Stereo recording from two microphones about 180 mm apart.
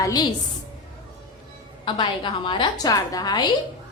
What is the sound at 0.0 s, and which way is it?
Speech, 20° left (ahead or behind).